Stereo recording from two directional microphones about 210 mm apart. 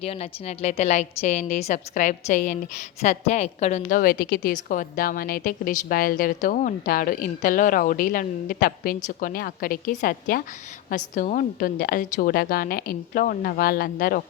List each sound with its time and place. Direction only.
0.0 s a woman's voice: 30° left (ahead or behind)